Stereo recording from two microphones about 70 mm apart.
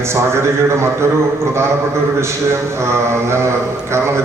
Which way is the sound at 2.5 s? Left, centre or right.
Right.